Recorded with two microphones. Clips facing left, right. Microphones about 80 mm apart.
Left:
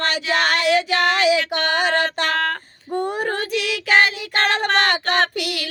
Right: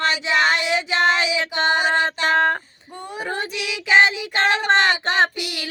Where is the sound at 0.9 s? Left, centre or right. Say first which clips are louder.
Left 2 dB; left.